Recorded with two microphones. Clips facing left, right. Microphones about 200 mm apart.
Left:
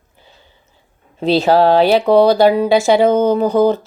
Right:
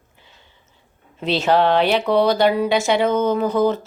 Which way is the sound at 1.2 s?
35° left (ahead or behind).